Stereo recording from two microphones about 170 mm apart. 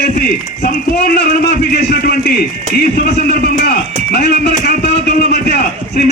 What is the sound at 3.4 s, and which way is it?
A man's voice, 60° left (ahead or behind).